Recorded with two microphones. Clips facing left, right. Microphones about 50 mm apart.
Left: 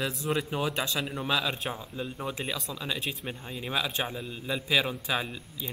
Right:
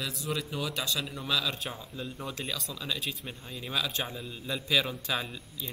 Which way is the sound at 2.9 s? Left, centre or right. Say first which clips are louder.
Left 2 dB; centre.